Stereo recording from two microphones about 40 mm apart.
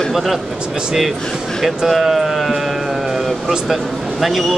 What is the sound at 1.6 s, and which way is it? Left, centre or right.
Speech, centre.